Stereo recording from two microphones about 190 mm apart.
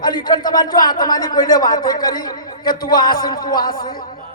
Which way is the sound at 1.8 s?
20° left (ahead or behind).